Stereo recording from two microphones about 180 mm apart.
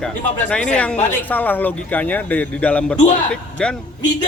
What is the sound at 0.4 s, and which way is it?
A man's voice, 5° left (ahead or behind).